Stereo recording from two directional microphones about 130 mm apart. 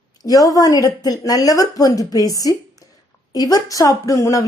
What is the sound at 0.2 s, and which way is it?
A woman's voice, 30° left (ahead or behind).